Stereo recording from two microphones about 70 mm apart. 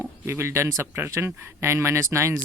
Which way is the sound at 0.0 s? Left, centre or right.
Right.